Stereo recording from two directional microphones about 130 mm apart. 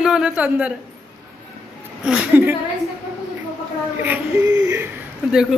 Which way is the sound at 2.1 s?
15° right (ahead or behind).